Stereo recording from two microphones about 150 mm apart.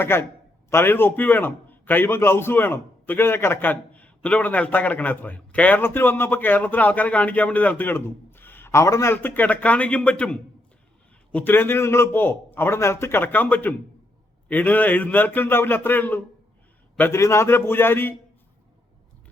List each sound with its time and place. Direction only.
0.0 s a man's voice: 15° left (ahead or behind)